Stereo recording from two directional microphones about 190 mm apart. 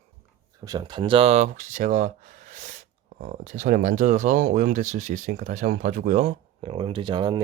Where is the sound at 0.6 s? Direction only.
20° right (ahead or behind); by 6.4 s 45° right (ahead or behind).